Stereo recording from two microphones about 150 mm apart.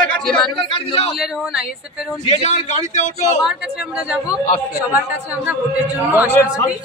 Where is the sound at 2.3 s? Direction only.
50° left (ahead or behind).